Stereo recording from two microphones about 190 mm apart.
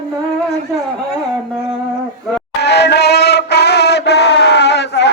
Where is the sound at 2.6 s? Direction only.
60° left (ahead or behind).